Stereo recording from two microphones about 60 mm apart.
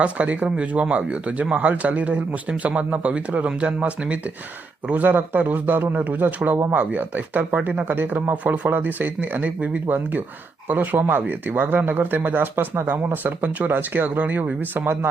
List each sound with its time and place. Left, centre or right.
0.0 s speech: right